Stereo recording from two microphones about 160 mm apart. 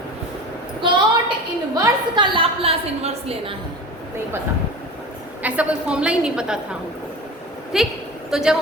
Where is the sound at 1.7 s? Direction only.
25° right (ahead or behind).